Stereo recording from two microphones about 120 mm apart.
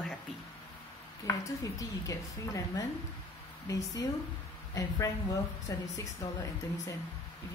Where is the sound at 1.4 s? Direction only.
25° left (ahead or behind).